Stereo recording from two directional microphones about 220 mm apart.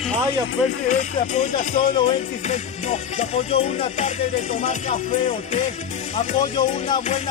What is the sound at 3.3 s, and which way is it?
Music, 30° left (ahead or behind).